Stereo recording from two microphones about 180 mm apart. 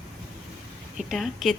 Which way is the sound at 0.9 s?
Centre (ahead or behind).